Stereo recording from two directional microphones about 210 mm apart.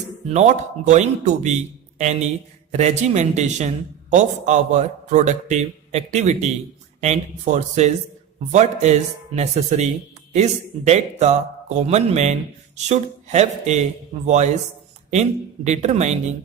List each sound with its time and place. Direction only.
0.3 s speech: 35° right (ahead or behind)